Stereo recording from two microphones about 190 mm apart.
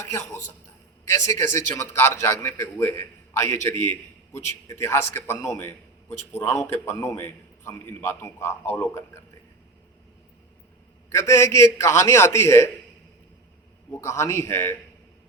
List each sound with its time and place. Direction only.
0.0 s a man's voice: 15° left (ahead or behind)
11.1 s a man's voice: 15° left (ahead or behind)
13.9 s a man's voice: 15° left (ahead or behind)